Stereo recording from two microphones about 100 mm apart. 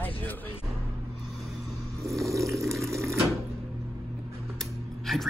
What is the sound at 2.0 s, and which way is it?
Water, 30° right (ahead or behind).